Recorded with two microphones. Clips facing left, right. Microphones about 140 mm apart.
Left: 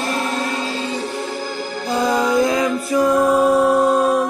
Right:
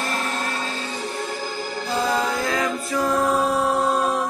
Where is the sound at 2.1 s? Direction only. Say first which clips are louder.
Left 9 dB; 15° left (ahead or behind).